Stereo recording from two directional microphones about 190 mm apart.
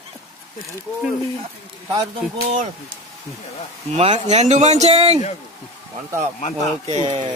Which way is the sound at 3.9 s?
35° right (ahead or behind).